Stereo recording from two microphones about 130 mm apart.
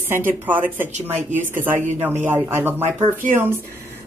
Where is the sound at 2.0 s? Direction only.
15° right (ahead or behind).